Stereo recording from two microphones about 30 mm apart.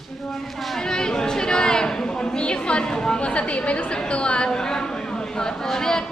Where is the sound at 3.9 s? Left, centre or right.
Left.